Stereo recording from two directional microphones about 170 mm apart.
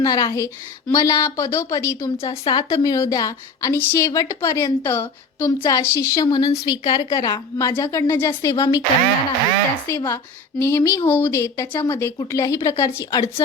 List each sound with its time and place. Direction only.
0.0 s a woman's voice: 20° left (ahead or behind)
9.9 s a woman's voice: 15° left (ahead or behind)